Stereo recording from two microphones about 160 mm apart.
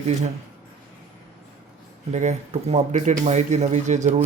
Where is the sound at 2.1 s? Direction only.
45° right (ahead or behind).